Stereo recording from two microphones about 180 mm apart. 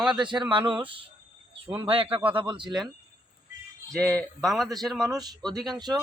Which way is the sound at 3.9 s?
5° left (ahead or behind).